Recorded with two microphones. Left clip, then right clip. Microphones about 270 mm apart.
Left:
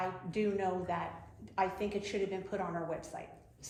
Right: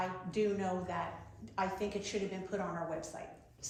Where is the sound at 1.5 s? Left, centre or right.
Left.